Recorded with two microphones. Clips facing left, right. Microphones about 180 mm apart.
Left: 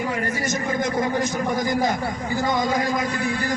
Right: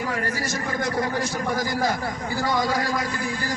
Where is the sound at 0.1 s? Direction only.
20° left (ahead or behind).